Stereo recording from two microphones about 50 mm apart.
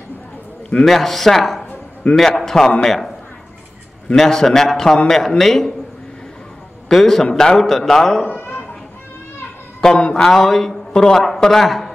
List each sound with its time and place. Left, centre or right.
0.8 s a man's voice: centre
4.1 s a man's voice: centre
6.9 s a man's voice: centre
8.4 s children playing: left
9.8 s a man's voice: centre